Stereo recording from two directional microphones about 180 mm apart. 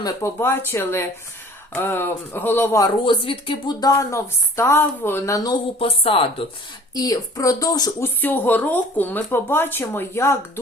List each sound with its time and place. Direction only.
0.0 s speech: 15° left (ahead or behind)
3.1 s speech: 30° left (ahead or behind)
5.8 s speech: 30° left (ahead or behind)
6.9 s speech: 20° left (ahead or behind)